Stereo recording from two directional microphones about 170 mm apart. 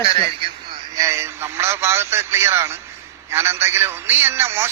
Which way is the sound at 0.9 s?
15° right (ahead or behind).